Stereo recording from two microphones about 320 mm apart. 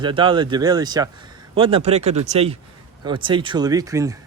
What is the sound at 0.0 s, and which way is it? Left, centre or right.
Speech, centre.